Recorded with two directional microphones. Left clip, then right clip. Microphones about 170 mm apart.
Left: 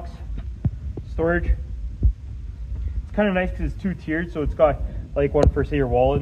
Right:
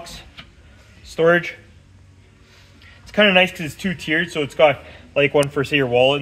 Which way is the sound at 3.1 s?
55° right (ahead or behind).